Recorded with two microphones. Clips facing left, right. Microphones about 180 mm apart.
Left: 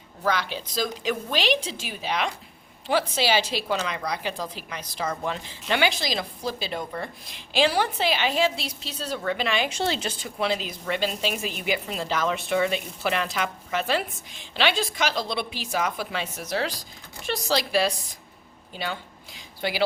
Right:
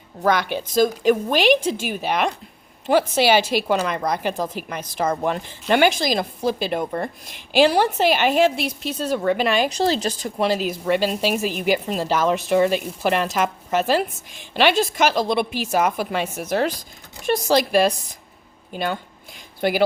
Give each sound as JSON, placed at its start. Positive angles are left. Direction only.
{"t": 0.2, "sound": "a woman's voice", "side_deg": -55}
{"t": 3.4, "sound": "a woman's voice", "side_deg": -10}
{"t": 3.7, "sound": "a woman's voice", "side_deg": -50}